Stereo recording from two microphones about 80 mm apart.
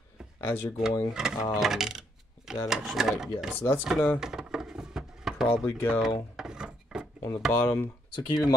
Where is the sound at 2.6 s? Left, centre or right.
Centre.